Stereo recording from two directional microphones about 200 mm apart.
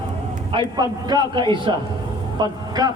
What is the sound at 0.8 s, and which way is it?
A man's voice, 20° right (ahead or behind).